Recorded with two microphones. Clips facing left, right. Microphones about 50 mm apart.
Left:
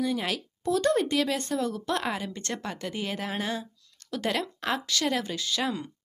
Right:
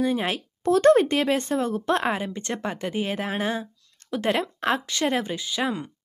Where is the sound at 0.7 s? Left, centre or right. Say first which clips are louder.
Right 7 dB; right.